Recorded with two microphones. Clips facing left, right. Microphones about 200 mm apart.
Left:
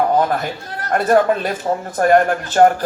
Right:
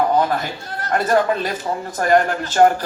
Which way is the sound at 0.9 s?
50° left (ahead or behind).